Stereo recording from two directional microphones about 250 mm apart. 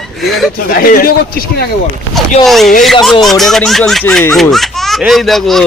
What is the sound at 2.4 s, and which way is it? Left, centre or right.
Speech, centre.